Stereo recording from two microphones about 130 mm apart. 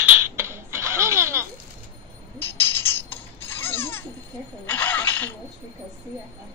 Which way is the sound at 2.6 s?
15° left (ahead or behind).